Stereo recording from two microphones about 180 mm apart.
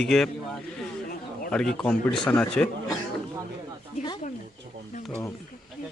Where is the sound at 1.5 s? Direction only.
5° left (ahead or behind).